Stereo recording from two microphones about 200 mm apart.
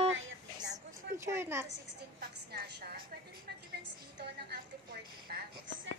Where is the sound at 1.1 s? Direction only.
15° right (ahead or behind).